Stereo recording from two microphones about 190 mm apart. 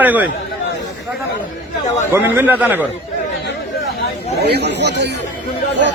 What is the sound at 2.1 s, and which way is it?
Speech, 10° right (ahead or behind).